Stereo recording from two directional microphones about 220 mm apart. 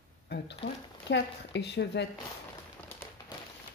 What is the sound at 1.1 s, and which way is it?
Speech, 50° left (ahead or behind).